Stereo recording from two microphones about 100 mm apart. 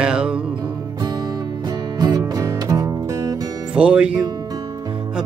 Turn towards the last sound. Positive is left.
turn(degrees=-10)  # may be behind; listen again after turning